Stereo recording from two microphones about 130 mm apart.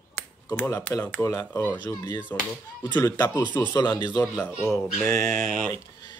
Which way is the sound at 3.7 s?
35° left (ahead or behind).